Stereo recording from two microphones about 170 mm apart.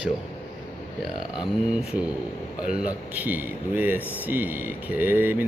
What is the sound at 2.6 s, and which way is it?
Speech, 5° right (ahead or behind).